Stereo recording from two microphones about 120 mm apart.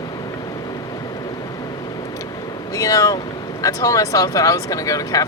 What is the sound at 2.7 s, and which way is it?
Speech, 25° left (ahead or behind).